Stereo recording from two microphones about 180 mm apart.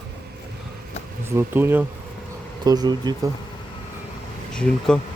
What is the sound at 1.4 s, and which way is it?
Speech, 10° right (ahead or behind).